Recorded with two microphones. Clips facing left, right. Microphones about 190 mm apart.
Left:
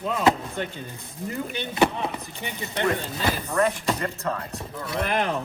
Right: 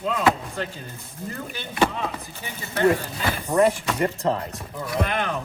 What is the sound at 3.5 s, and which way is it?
Speech, 10° right (ahead or behind).